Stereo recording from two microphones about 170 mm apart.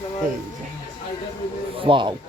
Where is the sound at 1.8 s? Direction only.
30° right (ahead or behind).